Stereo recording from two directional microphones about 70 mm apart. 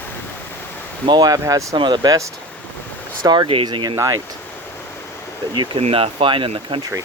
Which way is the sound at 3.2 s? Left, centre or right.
Right.